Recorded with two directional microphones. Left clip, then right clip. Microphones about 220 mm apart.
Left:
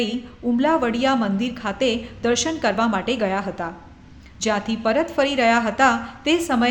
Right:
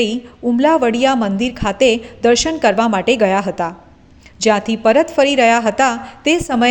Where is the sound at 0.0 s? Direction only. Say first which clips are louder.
Right 7 dB; 25° right (ahead or behind).